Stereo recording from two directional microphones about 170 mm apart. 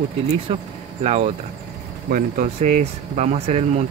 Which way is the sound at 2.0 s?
50° right (ahead or behind).